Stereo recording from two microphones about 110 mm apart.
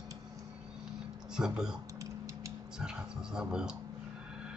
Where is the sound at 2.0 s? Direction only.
30° right (ahead or behind).